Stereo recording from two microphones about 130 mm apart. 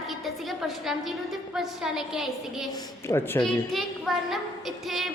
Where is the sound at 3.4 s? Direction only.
Centre (ahead or behind).